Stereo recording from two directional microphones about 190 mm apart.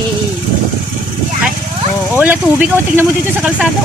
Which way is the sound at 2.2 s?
5° right (ahead or behind).